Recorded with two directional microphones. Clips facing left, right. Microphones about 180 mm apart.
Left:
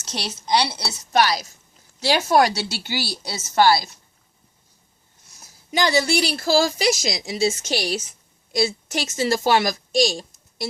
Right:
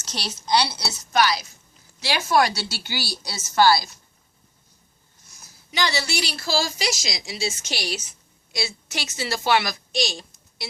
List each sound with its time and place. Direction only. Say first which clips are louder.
0.0 s a woman's voice: left 2 dB; 20° left (ahead or behind)
1.1 s a woman's voice: left 2 dB; 40° left (ahead or behind)
5.7 s a woman's voice: left 6 dB; 50° left (ahead or behind)